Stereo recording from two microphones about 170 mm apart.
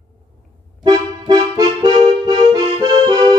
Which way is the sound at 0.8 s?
25° right (ahead or behind).